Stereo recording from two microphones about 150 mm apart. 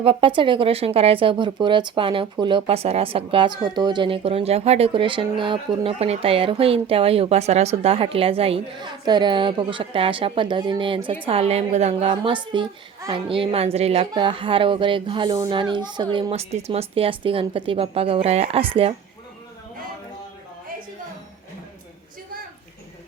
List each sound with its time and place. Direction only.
0.0 s a woman's voice: 40° right (ahead or behind)
12.0 s speech: 35° right (ahead or behind)